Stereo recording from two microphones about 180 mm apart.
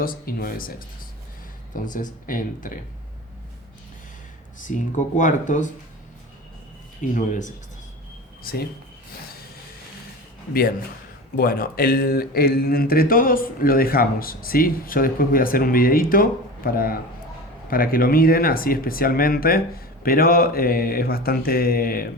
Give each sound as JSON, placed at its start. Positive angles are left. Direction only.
{"t": 0.0, "sound": "speech", "side_deg": 55}
{"t": 4.6, "sound": "speech", "side_deg": 45}
{"t": 7.0, "sound": "speech", "side_deg": 45}
{"t": 8.4, "sound": "speech", "side_deg": 55}
{"t": 10.5, "sound": "speech", "side_deg": 55}